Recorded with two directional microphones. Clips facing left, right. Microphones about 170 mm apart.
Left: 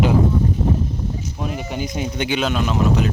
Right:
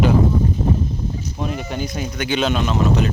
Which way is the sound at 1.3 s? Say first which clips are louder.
Right 1 dB; 5° left (ahead or behind).